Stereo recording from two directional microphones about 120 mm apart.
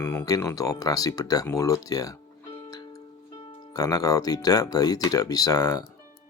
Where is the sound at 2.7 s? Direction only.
35° left (ahead or behind).